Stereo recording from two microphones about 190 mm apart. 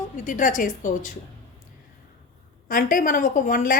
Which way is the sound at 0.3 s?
45° left (ahead or behind).